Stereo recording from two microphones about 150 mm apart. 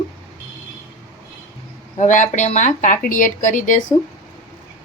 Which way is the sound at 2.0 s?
55° left (ahead or behind).